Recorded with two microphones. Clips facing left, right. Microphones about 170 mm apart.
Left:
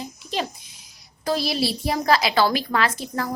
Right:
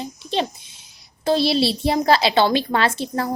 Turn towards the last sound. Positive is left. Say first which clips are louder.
# right 3 dB
turn(degrees=-30)  # may be behind; listen again after turning